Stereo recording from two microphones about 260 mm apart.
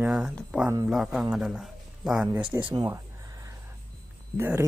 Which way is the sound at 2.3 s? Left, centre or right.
Centre.